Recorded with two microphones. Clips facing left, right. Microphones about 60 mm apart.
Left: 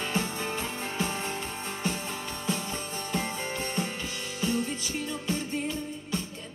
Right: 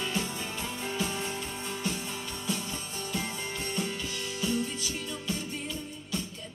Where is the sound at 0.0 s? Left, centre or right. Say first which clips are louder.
Left 2 dB; left.